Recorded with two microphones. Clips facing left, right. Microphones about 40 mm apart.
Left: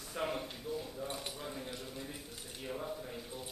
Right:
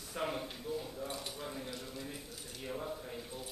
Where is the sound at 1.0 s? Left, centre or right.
Centre.